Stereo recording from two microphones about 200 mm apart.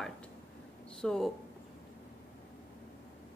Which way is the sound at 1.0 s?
Centre (ahead or behind).